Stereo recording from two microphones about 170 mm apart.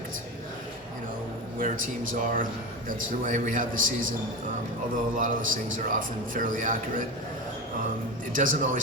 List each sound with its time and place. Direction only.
1.5 s a man's voice: 55° right (ahead or behind)
5.1 s a man's voice: 50° right (ahead or behind)
8.4 s a man's voice: 50° right (ahead or behind)